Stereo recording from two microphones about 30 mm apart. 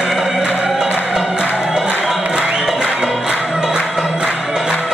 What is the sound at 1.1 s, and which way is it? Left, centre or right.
Music, right.